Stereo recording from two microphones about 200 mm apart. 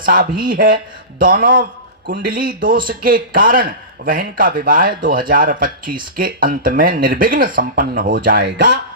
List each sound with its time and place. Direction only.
0.0 s speech: 45° right (ahead or behind); by 8.8 s 60° right (ahead or behind)